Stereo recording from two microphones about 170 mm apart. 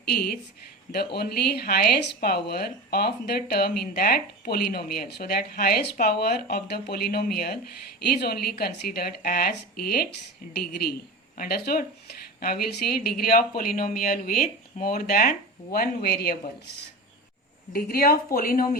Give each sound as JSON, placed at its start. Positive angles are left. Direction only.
{"t": 0.0, "sound": "speech", "side_deg": 70}